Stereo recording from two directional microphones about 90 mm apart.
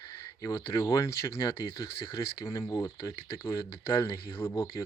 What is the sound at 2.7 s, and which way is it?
Speech, 35° left (ahead or behind).